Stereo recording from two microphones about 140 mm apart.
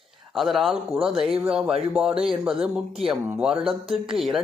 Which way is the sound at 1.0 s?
40° right (ahead or behind).